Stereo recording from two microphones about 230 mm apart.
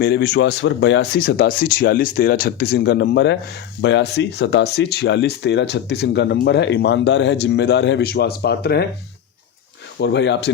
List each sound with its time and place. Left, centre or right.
0.0 s speech: left
10.0 s speech: left